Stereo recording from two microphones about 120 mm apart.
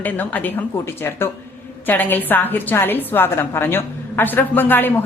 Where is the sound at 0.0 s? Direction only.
15° left (ahead or behind).